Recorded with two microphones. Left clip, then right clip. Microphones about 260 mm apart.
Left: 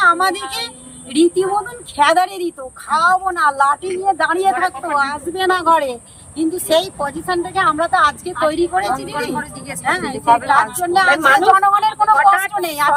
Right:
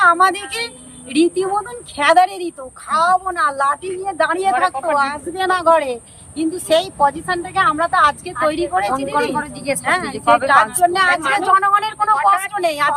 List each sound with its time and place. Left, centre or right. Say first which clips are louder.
0.0 s speech: right 1 dB; centre
9.3 s a woman's voice: right 4 dB; right
9.8 s speech: left 1 dB; centre
10.2 s a woman's voice: left 1 dB; right
10.5 s speech: right 1 dB; centre